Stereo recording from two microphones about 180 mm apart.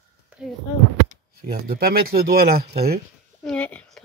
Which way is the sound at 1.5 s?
55° right (ahead or behind).